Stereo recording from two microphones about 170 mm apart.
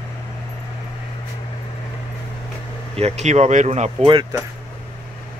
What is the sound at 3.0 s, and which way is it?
Speech, 40° right (ahead or behind).